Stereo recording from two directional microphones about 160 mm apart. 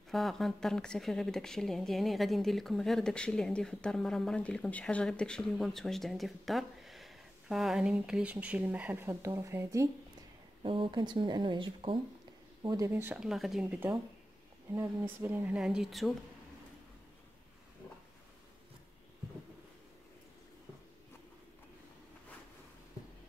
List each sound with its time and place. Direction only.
0.1 s speech: centre (ahead or behind); by 9.8 s 15° right (ahead or behind)
10.6 s speech: 35° right (ahead or behind)
12.6 s speech: 20° right (ahead or behind); by 16.1 s centre (ahead or behind)